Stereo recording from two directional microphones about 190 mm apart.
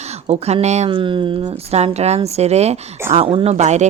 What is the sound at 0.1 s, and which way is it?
A woman's voice, 35° right (ahead or behind).